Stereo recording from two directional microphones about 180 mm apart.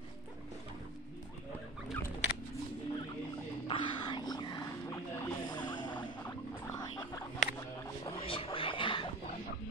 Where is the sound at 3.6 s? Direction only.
25° left (ahead or behind).